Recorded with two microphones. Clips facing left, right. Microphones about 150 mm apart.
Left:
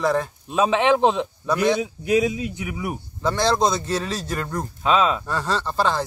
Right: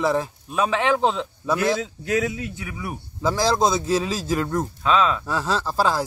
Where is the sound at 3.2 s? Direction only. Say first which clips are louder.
Even; 5° right (ahead or behind).